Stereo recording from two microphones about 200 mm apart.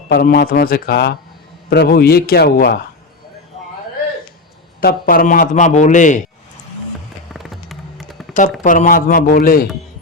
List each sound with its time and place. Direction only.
0.1 s a man's voice: 50° left (ahead or behind)
4.8 s a man's voice: 50° left (ahead or behind)
7.3 s music: centre (ahead or behind)
8.6 s a man's voice: 40° left (ahead or behind)